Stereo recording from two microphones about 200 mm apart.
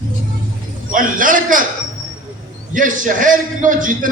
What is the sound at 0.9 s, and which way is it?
Speech, 40° right (ahead or behind).